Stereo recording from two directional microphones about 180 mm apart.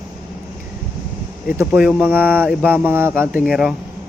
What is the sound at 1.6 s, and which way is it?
Speech, centre (ahead or behind).